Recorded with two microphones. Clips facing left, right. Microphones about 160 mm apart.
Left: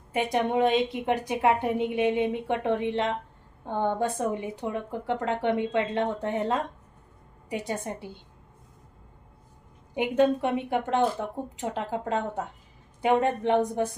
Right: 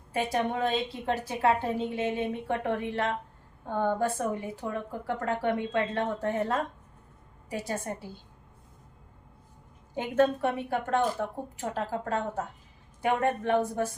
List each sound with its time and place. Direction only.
0.1 s a woman's voice: 20° left (ahead or behind)
7.7 s a woman's voice: 20° left (ahead or behind)
9.9 s a woman's voice: 15° left (ahead or behind)